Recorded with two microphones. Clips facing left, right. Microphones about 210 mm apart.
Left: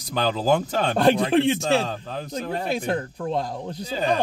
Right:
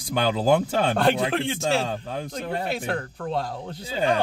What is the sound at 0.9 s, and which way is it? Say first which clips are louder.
Speech: left 7 dB; 15° left (ahead or behind).